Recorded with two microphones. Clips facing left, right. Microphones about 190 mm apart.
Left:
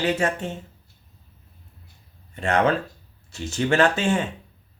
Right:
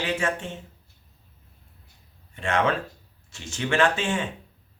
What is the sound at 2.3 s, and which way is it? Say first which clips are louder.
Speech: left 3 dB; 40° left (ahead or behind).